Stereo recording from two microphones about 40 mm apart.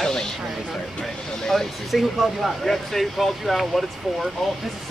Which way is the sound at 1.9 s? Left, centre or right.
Centre.